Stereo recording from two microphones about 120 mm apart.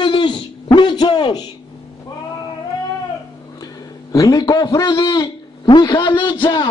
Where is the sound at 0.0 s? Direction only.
40° left (ahead or behind).